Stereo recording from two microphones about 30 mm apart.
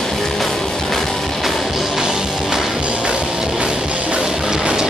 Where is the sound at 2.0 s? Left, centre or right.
Right.